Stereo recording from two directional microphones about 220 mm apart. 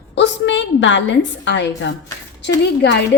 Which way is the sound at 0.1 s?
55° left (ahead or behind).